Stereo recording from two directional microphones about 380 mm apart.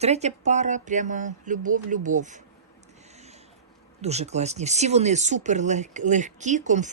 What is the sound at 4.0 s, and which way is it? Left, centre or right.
A woman's voice, centre.